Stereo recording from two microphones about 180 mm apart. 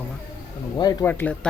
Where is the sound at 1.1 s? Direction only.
10° left (ahead or behind).